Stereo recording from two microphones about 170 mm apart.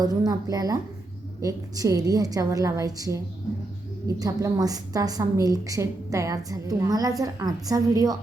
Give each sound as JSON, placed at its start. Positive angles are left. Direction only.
{"t": 0.0, "sound": "a woman's voice", "side_deg": -20}